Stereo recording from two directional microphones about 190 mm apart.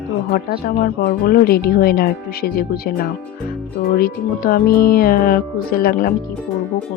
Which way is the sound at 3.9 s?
50° left (ahead or behind).